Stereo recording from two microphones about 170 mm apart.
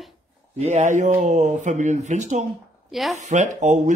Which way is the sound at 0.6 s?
45° right (ahead or behind).